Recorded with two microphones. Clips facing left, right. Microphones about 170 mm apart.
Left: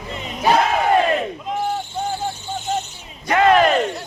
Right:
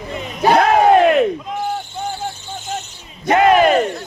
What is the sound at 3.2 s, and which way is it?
Speech, 25° right (ahead or behind).